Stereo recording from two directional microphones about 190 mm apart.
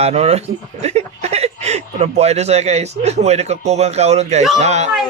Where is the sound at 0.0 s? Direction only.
35° right (ahead or behind).